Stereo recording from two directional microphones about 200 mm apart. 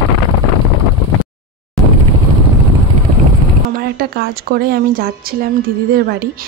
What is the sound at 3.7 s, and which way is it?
A woman's voice, 50° right (ahead or behind).